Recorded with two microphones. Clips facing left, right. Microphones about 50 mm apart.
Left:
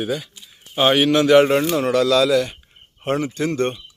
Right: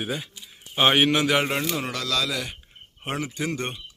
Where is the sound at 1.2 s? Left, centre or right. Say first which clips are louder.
Left 10 dB; centre.